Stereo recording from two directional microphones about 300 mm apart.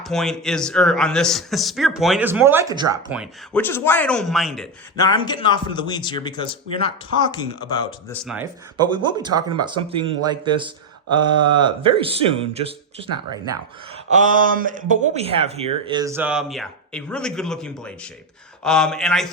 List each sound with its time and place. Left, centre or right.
0.0 s speech: centre
5.0 s a man's voice: centre
8.2 s speech: centre
8.8 s speech: centre
14.1 s speech: right; by 19.3 s centre